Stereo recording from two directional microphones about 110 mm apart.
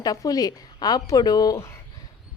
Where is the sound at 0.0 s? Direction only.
35° left (ahead or behind).